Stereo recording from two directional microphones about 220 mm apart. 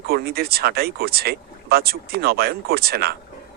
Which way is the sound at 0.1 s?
45° right (ahead or behind).